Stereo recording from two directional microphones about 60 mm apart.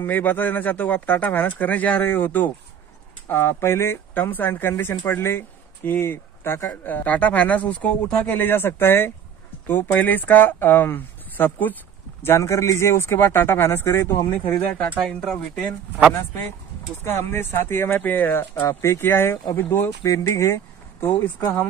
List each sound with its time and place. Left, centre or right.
0.0 s a man's voice: left
3.3 s speech: left
4.1 s a man's voice: left
6.8 s speech: left
8.4 s a man's voice: left
12.2 s a man's voice: left
15.1 s speech: centre
16.1 s a man's voice: left
18.7 s speech: left
20.0 s speech: left